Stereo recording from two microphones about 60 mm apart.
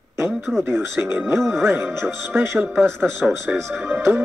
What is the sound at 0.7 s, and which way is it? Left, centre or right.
Speech, right.